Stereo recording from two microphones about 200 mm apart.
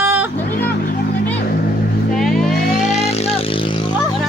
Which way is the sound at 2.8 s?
35° left (ahead or behind).